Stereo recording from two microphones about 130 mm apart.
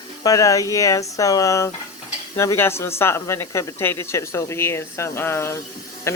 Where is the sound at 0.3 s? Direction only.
25° left (ahead or behind).